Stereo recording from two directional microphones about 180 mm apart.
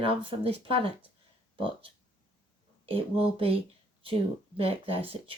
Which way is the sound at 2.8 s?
30° right (ahead or behind).